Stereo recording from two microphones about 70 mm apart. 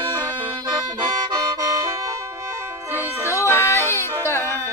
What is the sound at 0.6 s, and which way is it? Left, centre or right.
Music, right.